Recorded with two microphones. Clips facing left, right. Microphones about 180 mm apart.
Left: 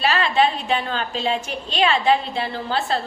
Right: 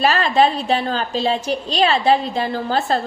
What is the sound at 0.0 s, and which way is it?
A woman's voice, 40° right (ahead or behind).